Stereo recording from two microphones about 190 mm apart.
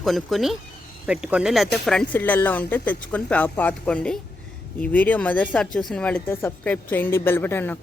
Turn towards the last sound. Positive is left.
turn(degrees=10)  # may be behind; listen again after turning